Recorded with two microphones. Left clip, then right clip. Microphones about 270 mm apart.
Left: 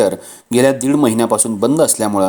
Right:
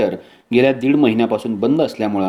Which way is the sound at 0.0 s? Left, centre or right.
Left.